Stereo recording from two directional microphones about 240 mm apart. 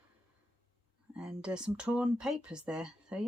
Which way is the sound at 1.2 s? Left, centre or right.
Centre.